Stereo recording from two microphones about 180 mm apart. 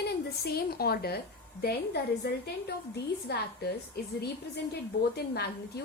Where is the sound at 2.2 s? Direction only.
60° left (ahead or behind).